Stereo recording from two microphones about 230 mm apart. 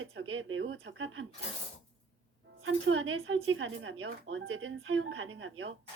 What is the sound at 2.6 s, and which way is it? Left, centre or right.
A woman's voice, right.